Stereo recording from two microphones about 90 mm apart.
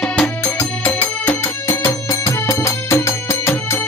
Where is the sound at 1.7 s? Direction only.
35° left (ahead or behind).